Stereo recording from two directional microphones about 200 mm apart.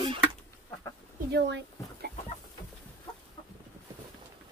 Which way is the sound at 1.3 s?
55° right (ahead or behind).